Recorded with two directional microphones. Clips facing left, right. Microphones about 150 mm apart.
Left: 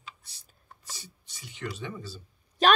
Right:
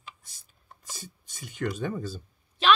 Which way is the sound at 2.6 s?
45° left (ahead or behind).